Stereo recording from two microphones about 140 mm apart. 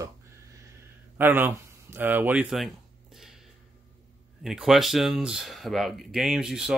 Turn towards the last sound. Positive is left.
turn(degrees=-5)  # may be behind; listen again after turning